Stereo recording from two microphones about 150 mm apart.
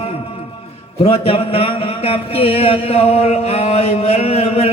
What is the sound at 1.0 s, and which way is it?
Speech, 40° left (ahead or behind).